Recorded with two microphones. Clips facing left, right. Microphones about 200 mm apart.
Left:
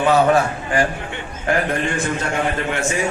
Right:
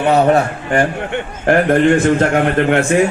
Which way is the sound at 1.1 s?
55° right (ahead or behind).